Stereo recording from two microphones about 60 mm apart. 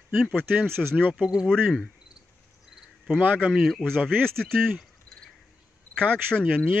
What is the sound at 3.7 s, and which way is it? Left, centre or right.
Speech, centre.